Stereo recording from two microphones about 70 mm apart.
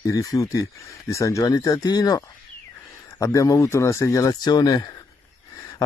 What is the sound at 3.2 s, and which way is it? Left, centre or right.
Speech, left.